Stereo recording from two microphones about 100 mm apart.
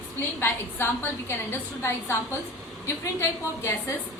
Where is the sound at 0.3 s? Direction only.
20° left (ahead or behind).